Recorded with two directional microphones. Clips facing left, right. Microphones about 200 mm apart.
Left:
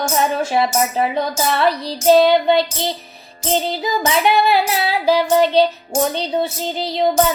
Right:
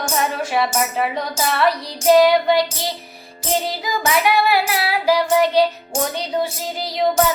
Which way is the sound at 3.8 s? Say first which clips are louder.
Left 2 dB; 25° left (ahead or behind).